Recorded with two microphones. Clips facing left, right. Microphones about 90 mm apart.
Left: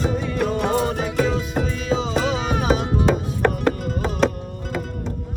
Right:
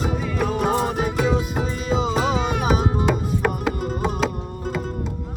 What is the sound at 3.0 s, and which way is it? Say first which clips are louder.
Music: left 2 dB; 5° right (ahead or behind).